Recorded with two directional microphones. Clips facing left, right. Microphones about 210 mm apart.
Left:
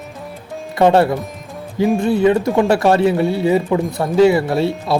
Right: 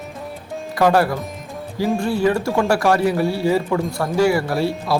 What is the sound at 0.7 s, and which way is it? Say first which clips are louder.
Speech: left 4 dB; 25° left (ahead or behind).